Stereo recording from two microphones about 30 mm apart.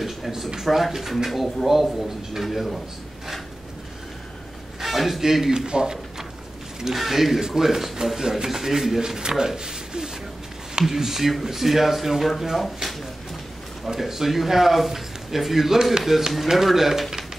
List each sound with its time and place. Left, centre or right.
0.6 s speech: centre
4.7 s a man's voice: centre
5.7 s speech: right
6.8 s speech: centre
9.0 s speech: right; by 12.9 s centre
13.9 s speech: centre